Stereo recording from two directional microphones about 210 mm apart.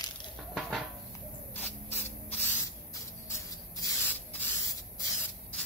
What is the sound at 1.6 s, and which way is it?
Spray, 10° left (ahead or behind).